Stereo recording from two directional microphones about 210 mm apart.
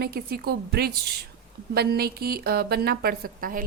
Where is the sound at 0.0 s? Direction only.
50° right (ahead or behind).